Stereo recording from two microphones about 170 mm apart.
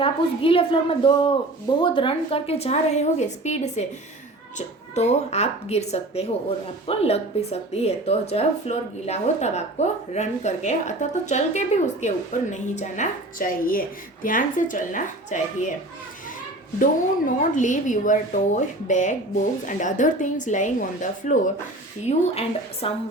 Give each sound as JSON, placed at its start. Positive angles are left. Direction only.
{"t": 0.0, "sound": "a woman's voice", "side_deg": 30}
{"t": 16.8, "sound": "speech", "side_deg": 50}
{"t": 22.0, "sound": "a woman's voice", "side_deg": 35}